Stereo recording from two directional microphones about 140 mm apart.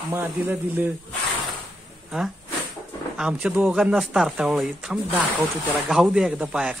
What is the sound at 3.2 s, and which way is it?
Speech, 5° right (ahead or behind).